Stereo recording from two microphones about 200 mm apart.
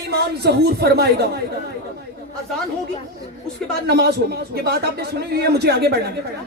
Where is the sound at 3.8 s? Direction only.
55° right (ahead or behind).